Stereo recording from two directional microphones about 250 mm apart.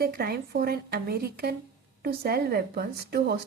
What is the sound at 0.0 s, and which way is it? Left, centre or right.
A woman's voice, right.